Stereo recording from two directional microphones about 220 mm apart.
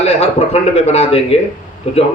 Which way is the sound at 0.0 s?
25° left (ahead or behind).